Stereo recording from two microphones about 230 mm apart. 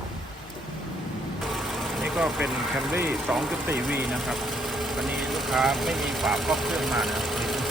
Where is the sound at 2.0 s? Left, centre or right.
Centre.